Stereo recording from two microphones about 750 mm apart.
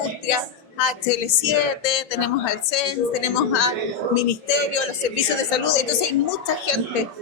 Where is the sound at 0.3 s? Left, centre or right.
Left.